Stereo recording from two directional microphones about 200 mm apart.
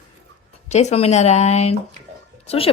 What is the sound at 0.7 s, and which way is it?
Speech, 35° left (ahead or behind).